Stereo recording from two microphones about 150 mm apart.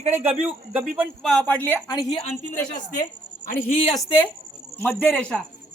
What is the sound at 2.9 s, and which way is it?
Speech, 65° left (ahead or behind).